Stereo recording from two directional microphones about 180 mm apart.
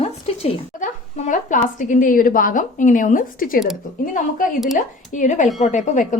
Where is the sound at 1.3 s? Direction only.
45° left (ahead or behind).